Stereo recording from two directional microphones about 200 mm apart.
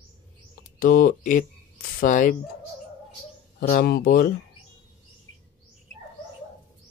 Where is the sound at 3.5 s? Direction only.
50° left (ahead or behind).